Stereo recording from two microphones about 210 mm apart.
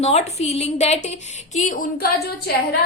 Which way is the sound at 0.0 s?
30° left (ahead or behind).